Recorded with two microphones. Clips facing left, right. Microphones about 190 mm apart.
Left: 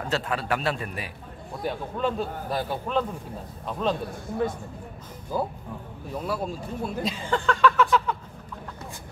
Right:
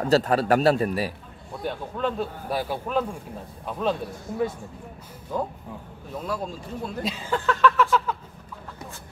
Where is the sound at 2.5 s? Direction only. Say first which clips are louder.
Right 1 dB; 5° right (ahead or behind).